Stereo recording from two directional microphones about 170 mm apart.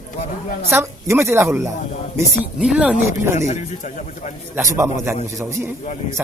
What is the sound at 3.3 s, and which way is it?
Speech, 45° left (ahead or behind).